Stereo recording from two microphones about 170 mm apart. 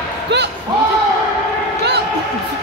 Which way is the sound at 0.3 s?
90° right.